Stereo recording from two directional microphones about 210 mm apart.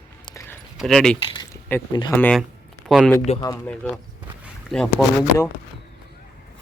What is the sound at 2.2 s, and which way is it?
Speech, 5° left (ahead or behind).